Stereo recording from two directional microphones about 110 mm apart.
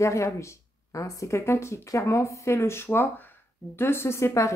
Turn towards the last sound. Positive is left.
turn(degrees=25)  # may be behind; listen again after turning